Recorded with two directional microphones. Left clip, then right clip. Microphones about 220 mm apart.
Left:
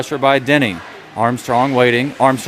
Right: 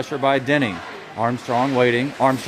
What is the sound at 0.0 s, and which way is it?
Speech, 25° left (ahead or behind).